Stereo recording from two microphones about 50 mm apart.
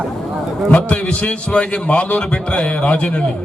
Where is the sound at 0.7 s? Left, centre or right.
Left.